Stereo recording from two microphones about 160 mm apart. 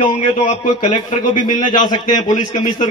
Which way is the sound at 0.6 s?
30° left (ahead or behind).